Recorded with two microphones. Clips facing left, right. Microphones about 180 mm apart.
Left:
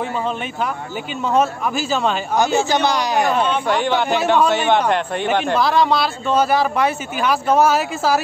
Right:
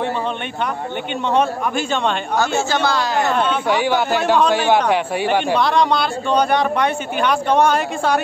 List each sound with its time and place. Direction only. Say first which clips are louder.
1.3 s speech: even; 5° left (ahead or behind)
2.3 s a man's voice: left 3 dB; 20° left (ahead or behind)
3.3 s speech: even; centre (ahead or behind)